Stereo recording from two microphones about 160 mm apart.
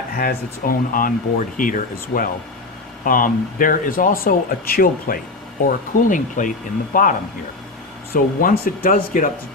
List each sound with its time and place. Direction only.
0.2 s speech: 65° left (ahead or behind)
5.6 s speech: 55° left (ahead or behind)
8.1 s speech: 65° left (ahead or behind)